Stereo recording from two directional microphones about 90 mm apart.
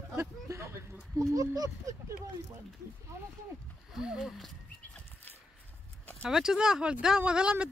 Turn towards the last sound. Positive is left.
turn(degrees=-10)  # may be behind; listen again after turning